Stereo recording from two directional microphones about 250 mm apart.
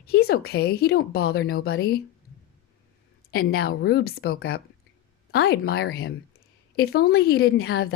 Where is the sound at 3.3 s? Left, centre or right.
Left.